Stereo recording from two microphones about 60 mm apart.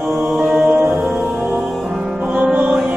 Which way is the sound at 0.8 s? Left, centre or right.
Right.